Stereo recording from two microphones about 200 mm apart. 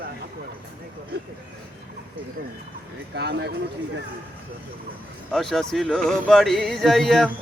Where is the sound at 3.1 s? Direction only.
55° right (ahead or behind).